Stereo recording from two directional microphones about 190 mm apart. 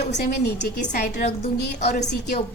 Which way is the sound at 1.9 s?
40° left (ahead or behind).